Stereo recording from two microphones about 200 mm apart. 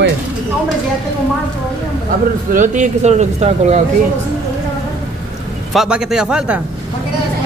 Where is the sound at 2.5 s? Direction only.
40° right (ahead or behind).